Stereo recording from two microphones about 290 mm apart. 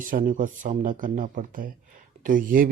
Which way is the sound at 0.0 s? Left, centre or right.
Right.